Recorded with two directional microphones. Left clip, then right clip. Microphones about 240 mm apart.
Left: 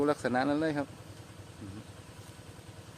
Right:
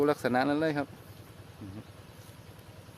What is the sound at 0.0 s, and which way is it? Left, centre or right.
Speech, right.